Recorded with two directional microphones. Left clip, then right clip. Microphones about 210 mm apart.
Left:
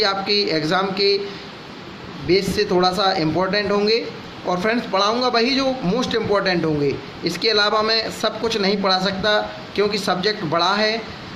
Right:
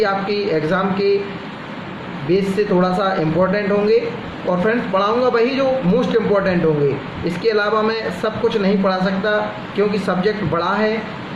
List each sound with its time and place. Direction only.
0.0 s speech: 50° left (ahead or behind)
2.3 s speech: 50° left (ahead or behind)